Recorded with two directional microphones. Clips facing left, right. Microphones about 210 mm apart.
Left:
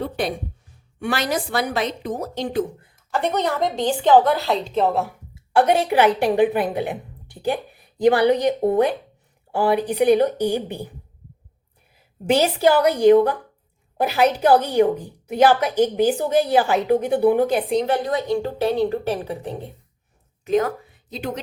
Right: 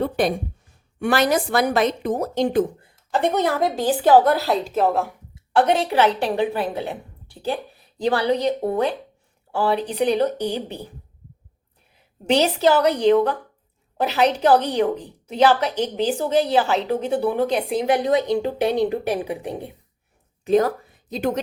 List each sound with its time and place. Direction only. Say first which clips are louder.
1.0 s a woman's voice: right 4 dB; 50° right (ahead or behind)
2.8 s a woman's voice: right 2 dB; 20° right (ahead or behind); by 10.8 s 10° left (ahead or behind)
11.9 s a woman's voice: even; 10° left (ahead or behind)
17.8 s a woman's voice: right 3 dB; 15° right (ahead or behind)
20.4 s a sound: right 2 dB; 35° right (ahead or behind)